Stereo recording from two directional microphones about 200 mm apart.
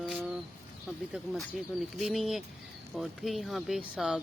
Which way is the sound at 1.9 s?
Centre (ahead or behind).